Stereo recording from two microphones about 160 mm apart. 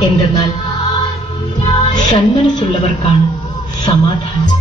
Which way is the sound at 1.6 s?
30° left (ahead or behind).